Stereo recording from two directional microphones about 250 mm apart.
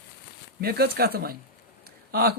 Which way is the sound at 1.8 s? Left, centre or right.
Right.